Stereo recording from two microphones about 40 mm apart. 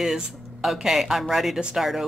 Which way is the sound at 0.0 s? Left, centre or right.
Centre.